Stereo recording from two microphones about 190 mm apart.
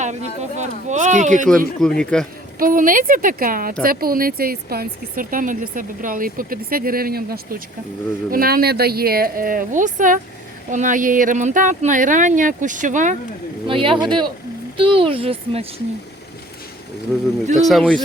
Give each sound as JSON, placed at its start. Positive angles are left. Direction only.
{"t": 0.0, "sound": "speech", "side_deg": -40}
{"t": 1.5, "sound": "speech", "side_deg": 5}
{"t": 2.6, "sound": "speech", "side_deg": -45}
{"t": 13.7, "sound": "speech", "side_deg": -25}
{"t": 17.6, "sound": "speech", "side_deg": 0}